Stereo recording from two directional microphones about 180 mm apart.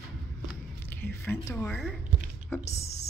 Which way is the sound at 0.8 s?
10° left (ahead or behind).